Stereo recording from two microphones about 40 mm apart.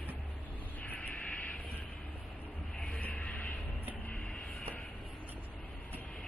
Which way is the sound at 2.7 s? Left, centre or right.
Left.